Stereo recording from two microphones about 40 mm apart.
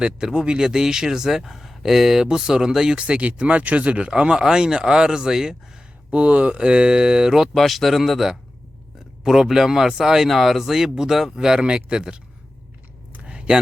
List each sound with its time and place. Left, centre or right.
0.3 s speech: right
3.0 s speech: right; by 5.5 s centre
6.1 s speech: right; by 7.5 s centre
7.5 s speech: centre
9.2 s speech: centre
10.2 s speech: centre; by 12.2 s right
13.2 s a sound: right